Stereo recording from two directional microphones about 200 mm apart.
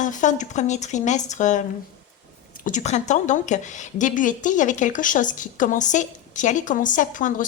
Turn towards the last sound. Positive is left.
turn(degrees=40)  # may be behind; listen again after turning